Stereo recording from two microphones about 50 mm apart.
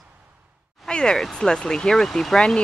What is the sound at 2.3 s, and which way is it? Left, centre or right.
Speech, centre.